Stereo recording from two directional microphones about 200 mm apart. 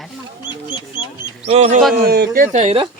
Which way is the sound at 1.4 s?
30° right (ahead or behind).